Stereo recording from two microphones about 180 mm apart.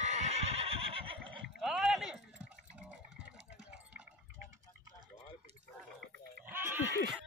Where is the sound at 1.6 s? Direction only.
Centre (ahead or behind).